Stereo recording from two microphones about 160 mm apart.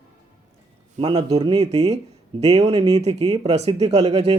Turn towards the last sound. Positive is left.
turn(degrees=-40)  # may be behind; listen again after turning